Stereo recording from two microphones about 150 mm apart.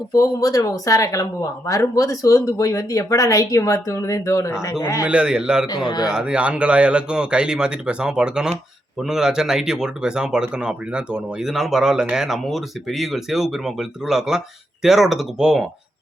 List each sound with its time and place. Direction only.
0.1 s speech: 25° left (ahead or behind)
5.0 s speech: 5° right (ahead or behind)
5.6 s speech: 30° left (ahead or behind)
6.1 s speech: 5° right (ahead or behind)